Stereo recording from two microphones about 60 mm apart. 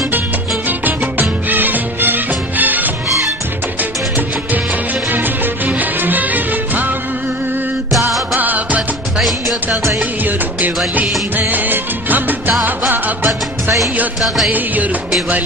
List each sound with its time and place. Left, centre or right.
0.7 s music: right
5.1 s music: right
8.4 s music: right
11.3 s music: right
14.2 s music: centre